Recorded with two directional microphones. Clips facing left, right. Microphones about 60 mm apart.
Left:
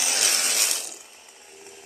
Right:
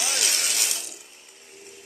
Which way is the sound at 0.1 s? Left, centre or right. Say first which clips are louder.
Left 1 dB; left.